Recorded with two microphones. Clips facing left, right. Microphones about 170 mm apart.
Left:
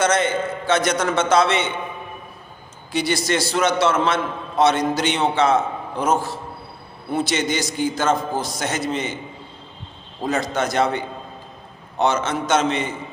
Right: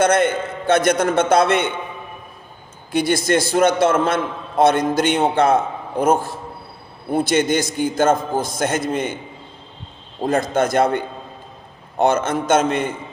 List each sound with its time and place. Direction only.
0.0 s a man's voice: 55° right (ahead or behind)
2.9 s a man's voice: 50° right (ahead or behind)
10.2 s a man's voice: 50° right (ahead or behind)